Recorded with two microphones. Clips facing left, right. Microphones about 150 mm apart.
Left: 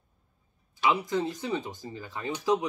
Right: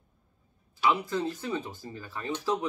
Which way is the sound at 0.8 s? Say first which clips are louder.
Left 1 dB; 15° left (ahead or behind).